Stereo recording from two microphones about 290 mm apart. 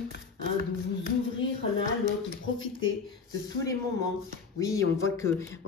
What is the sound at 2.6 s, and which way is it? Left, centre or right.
Speech, left.